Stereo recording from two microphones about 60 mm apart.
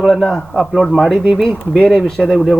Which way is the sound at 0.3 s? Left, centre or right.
Centre.